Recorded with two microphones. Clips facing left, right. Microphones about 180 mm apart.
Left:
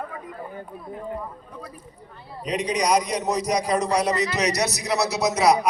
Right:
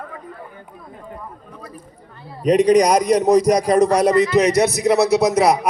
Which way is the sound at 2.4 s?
50° right (ahead or behind).